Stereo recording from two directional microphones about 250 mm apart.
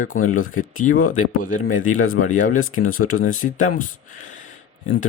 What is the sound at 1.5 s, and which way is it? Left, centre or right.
Speech, left.